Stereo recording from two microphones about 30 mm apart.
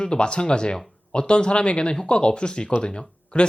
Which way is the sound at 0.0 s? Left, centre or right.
Left.